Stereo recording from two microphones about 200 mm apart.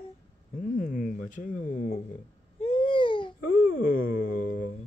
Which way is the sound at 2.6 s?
25° left (ahead or behind).